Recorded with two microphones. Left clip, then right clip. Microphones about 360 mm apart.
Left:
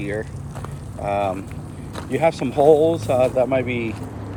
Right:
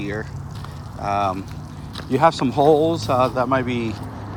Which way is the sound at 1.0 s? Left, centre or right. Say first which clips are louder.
Right 1 dB; centre.